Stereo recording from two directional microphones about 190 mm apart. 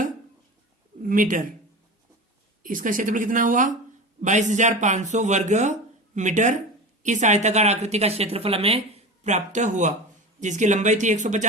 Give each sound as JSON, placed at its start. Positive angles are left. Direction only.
{"t": 1.0, "sound": "speech", "side_deg": -45}
{"t": 2.6, "sound": "a woman's voice", "side_deg": -45}